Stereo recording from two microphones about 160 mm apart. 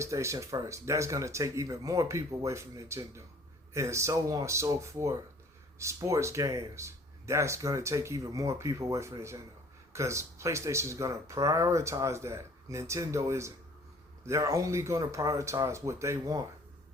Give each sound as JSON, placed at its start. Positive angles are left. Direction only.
{"t": 0.0, "sound": "speech", "side_deg": -20}